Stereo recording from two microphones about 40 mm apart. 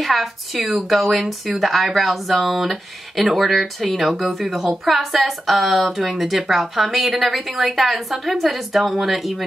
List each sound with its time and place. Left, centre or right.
0.0 s speech: centre